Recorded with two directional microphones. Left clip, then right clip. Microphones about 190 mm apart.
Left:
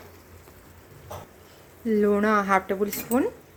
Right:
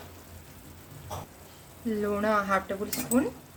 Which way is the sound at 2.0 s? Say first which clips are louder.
Left 4 dB; 35° left (ahead or behind).